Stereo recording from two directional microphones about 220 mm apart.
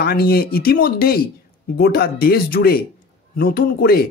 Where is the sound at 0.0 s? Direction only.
45° left (ahead or behind).